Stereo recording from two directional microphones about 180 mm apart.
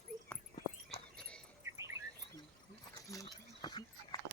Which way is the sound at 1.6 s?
15° right (ahead or behind).